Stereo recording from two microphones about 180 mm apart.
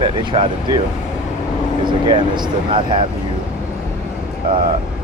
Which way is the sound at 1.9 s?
25° right (ahead or behind).